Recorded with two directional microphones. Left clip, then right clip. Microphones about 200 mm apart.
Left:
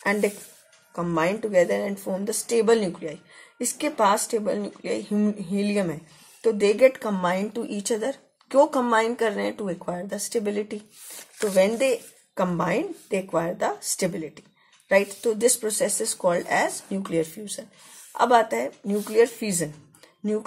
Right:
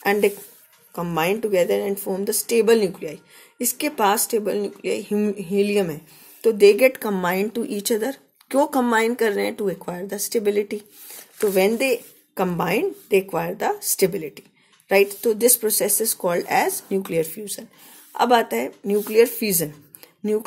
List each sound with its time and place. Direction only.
0.0 s speech: 40° right (ahead or behind)